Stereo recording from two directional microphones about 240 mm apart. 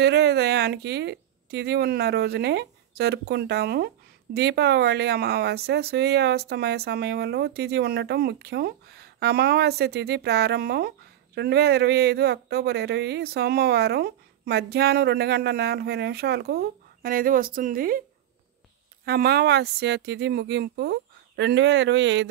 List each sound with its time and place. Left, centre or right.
0.0 s speech: right
19.0 s speech: right